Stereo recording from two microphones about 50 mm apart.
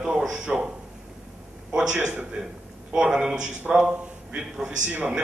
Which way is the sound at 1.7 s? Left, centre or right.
Right.